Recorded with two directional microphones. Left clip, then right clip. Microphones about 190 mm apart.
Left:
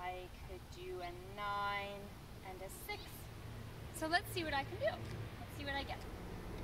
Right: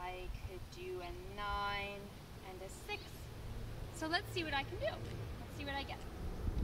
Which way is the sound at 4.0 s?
15° left (ahead or behind).